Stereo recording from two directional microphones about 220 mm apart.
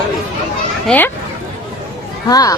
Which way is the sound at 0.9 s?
10° left (ahead or behind).